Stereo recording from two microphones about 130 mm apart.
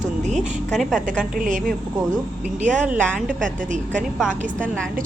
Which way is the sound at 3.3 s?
90° right.